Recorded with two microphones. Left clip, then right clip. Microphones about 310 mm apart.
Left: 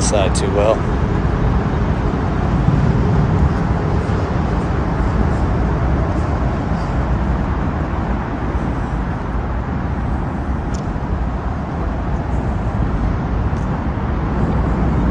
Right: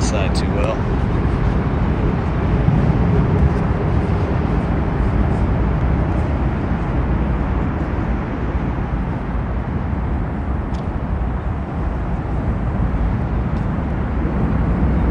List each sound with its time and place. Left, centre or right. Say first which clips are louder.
0.1 s speech: left 5 dB; centre